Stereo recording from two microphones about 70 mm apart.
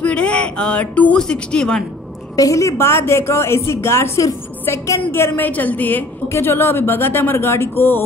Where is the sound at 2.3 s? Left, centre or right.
Left.